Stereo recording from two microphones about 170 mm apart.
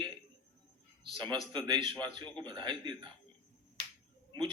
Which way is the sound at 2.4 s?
25° right (ahead or behind).